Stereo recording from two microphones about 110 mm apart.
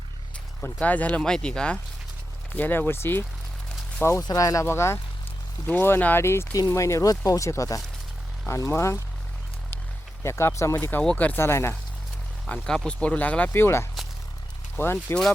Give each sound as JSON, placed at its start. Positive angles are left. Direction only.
{"t": 0.6, "sound": "speech", "side_deg": 15}
{"t": 4.2, "sound": "speech", "side_deg": 35}
{"t": 10.2, "sound": "speech", "side_deg": 25}
{"t": 12.6, "sound": "speech", "side_deg": 5}